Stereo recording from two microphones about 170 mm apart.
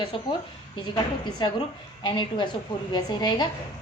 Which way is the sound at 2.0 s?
25° left (ahead or behind).